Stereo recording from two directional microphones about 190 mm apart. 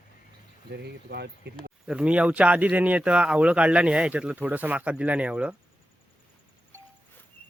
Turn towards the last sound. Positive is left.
turn(degrees=-5)  # may be behind; listen again after turning